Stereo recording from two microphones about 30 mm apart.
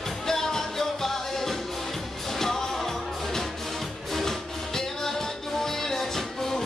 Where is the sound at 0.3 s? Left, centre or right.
Centre.